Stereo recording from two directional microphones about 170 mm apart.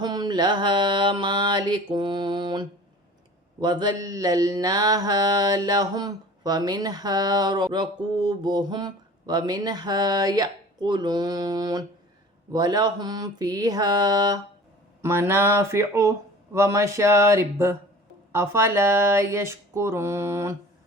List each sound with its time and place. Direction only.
0.0 s mantra: 25° right (ahead or behind)
15.0 s speech: 15° right (ahead or behind)